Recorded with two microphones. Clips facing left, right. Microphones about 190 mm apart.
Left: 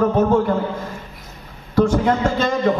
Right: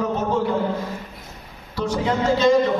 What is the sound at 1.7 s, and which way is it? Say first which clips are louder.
Speech: left 6 dB; 50° left (ahead or behind).